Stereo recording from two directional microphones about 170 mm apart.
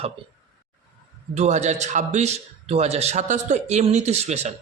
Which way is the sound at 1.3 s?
40° right (ahead or behind).